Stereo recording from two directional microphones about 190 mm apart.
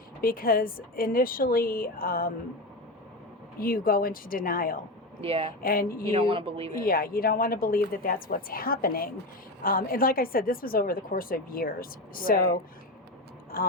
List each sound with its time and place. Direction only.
0.2 s a woman's voice: 50° left (ahead or behind)
3.6 s a woman's voice: 50° left (ahead or behind)
5.2 s speech: 30° right (ahead or behind)
5.6 s a woman's voice: 50° left (ahead or behind)
6.1 s a woman's voice: 30° right (ahead or behind)
6.7 s a woman's voice: 50° left (ahead or behind)
13.5 s a woman's voice: 50° left (ahead or behind)